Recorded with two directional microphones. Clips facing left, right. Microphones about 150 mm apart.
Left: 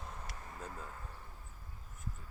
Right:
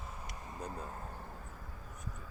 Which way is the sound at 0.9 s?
45° right (ahead or behind).